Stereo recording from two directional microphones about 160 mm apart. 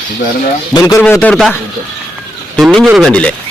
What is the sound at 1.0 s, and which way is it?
Speech, 10° left (ahead or behind).